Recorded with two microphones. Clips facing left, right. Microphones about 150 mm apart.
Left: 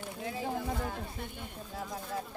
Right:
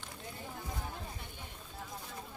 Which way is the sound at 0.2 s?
90° left.